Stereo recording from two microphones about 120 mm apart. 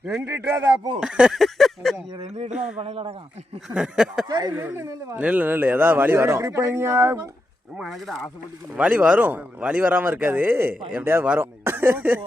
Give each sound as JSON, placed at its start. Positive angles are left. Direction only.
{"t": 0.3, "sound": "speech", "side_deg": -20}
{"t": 0.9, "sound": "speech", "side_deg": -5}
{"t": 2.2, "sound": "speech", "side_deg": -70}
{"t": 2.8, "sound": "speech", "side_deg": -55}
{"t": 3.8, "sound": "speech", "side_deg": -5}
{"t": 4.3, "sound": "speech", "side_deg": -35}
{"t": 4.5, "sound": "speech", "side_deg": -15}
{"t": 7.8, "sound": "speech", "side_deg": 0}
{"t": 8.7, "sound": "speech", "side_deg": -10}